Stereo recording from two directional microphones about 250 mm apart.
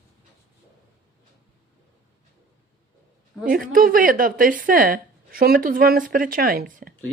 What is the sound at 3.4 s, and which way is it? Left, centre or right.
Speech, right.